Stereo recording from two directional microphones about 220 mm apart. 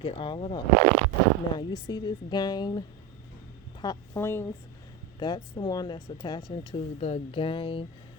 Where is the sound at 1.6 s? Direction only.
20° left (ahead or behind).